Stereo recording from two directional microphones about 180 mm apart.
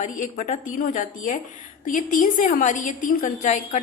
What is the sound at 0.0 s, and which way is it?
A woman's voice, 45° left (ahead or behind).